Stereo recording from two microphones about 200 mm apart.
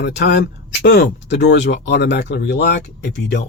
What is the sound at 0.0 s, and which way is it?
Speech, 55° left (ahead or behind).